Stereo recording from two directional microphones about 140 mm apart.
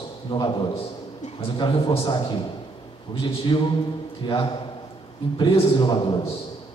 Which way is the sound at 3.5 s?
35° left (ahead or behind).